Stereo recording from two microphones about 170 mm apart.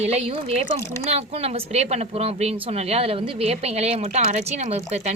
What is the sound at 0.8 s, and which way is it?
Speech, 15° left (ahead or behind).